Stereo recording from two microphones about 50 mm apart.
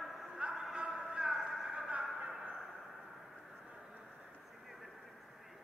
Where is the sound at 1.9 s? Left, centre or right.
Right.